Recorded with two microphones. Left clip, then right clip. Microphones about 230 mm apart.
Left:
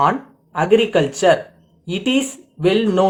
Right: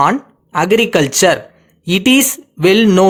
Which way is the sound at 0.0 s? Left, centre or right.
Right.